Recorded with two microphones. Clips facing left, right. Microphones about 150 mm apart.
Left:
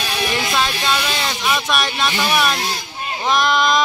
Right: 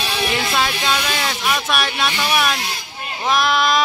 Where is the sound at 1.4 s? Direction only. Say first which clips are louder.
Left 2 dB; 5° right (ahead or behind).